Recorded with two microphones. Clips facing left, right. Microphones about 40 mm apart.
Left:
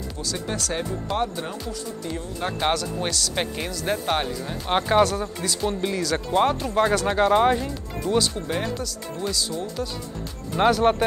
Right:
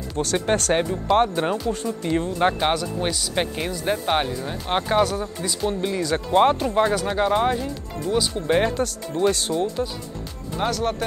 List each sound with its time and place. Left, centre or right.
0.2 s speech: right
2.6 s speech: centre
4.6 s speech: centre
6.1 s speech: centre
7.1 s speech: centre
8.5 s speech: right
10.6 s speech: left